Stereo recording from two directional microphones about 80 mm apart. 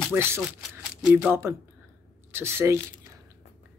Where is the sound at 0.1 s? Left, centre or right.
Right.